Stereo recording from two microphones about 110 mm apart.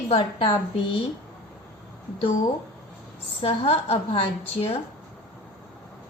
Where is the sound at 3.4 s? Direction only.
65° left (ahead or behind).